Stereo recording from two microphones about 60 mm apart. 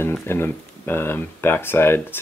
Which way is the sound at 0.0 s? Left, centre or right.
Left.